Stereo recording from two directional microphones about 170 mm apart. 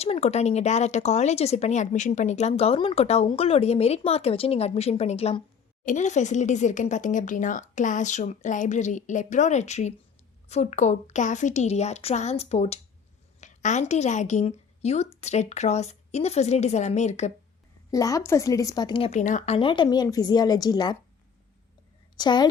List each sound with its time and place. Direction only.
0.0 s speech: 40° left (ahead or behind)
17.9 s a woman's voice: 20° left (ahead or behind)
19.2 s speech: 45° left (ahead or behind)
19.5 s a woman's voice: 30° left (ahead or behind)
22.1 s a woman's voice: 25° left (ahead or behind)